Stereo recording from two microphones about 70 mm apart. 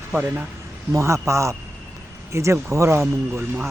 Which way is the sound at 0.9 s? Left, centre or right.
Right.